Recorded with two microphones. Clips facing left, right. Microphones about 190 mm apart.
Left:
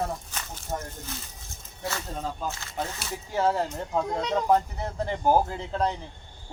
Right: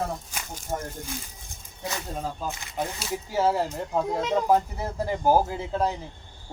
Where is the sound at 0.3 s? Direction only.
15° right (ahead or behind).